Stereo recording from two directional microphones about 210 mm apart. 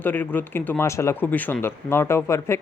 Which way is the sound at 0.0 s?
10° left (ahead or behind).